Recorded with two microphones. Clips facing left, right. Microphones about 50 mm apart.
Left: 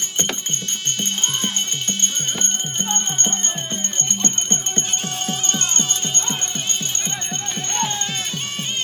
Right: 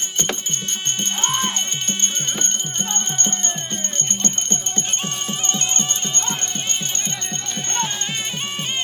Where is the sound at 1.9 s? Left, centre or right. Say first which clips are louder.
Even; right.